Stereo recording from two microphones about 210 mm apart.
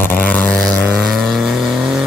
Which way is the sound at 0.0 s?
10° left (ahead or behind).